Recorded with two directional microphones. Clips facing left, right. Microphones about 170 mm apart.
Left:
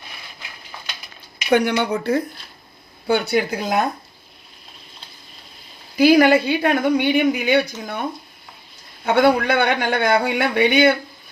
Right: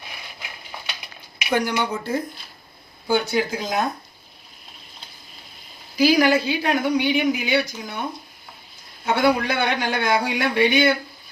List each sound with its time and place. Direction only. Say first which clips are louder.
1.5 s speech: left 5 dB; 60° left (ahead or behind)
6.0 s speech: left 4 dB; 55° left (ahead or behind)
9.1 s speech: left 4 dB; 55° left (ahead or behind)